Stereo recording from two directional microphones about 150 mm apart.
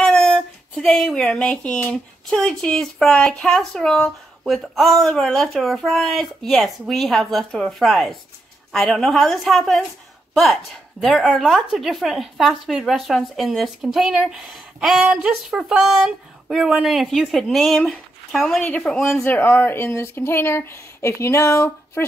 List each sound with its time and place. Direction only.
0.0 s a woman's voice: 5° left (ahead or behind)